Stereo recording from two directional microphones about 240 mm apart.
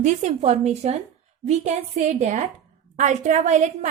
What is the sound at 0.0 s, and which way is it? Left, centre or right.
A woman's voice, right.